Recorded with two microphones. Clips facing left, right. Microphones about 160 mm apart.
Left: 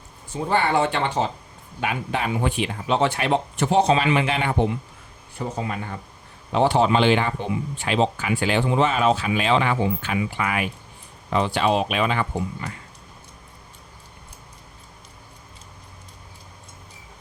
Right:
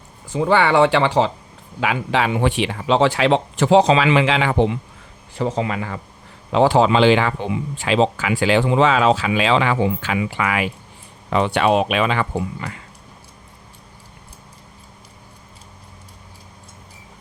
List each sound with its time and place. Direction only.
0.3 s speech: 90° right
11.3 s speech: 75° right (ahead or behind); by 12.8 s 90° right